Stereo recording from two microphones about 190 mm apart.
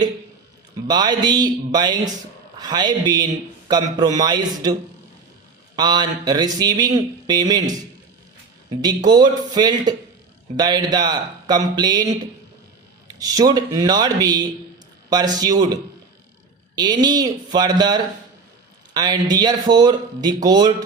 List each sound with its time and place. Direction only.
0.9 s speech: 20° right (ahead or behind)
8.7 s speech: 20° right (ahead or behind)